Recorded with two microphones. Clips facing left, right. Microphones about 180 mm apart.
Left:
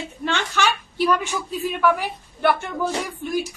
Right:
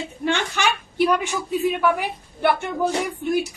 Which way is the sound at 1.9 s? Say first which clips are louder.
Right 1 dB; 15° right (ahead or behind).